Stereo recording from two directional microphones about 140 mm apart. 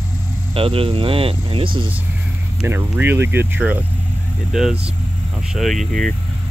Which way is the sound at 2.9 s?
15° right (ahead or behind).